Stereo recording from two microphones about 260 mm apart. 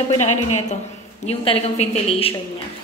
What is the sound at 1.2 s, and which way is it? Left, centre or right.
A woman's voice, left.